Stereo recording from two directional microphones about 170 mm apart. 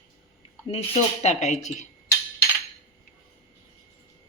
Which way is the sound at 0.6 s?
35° left (ahead or behind).